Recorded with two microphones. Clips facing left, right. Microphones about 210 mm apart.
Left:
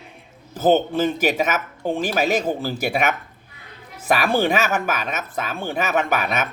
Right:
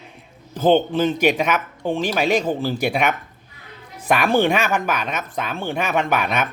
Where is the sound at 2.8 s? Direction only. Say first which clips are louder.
Right 1 dB; 5° left (ahead or behind).